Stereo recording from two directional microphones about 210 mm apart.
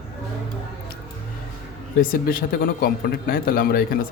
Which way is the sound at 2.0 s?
45° left (ahead or behind).